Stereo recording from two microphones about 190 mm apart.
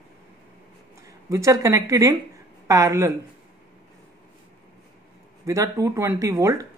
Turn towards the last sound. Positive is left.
turn(degrees=-15)  # may be behind; listen again after turning